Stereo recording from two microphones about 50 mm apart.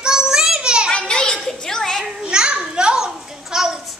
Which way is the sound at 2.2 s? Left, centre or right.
Centre.